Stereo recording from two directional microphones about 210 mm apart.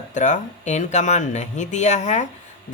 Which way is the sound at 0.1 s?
35° left (ahead or behind).